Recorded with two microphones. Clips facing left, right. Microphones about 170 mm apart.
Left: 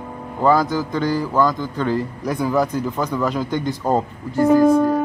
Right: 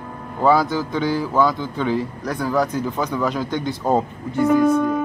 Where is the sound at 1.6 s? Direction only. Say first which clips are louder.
Left 1 dB; 15° right (ahead or behind).